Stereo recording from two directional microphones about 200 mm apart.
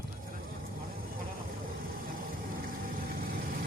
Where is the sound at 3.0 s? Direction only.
45° right (ahead or behind).